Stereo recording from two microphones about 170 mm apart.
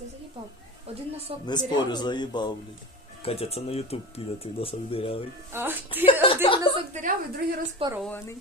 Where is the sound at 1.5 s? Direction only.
25° left (ahead or behind).